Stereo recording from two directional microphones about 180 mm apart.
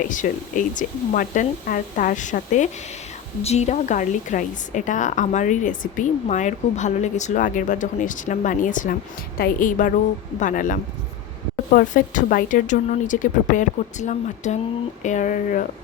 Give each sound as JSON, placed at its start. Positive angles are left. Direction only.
{"t": 0.0, "sound": "a woman's voice", "side_deg": 45}